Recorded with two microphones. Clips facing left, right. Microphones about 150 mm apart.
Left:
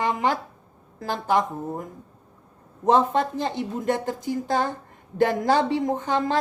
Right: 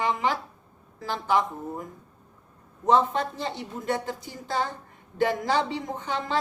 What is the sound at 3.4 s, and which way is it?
Speech, 50° left (ahead or behind).